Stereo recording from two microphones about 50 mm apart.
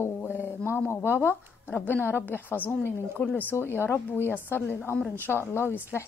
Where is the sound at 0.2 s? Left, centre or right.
Left.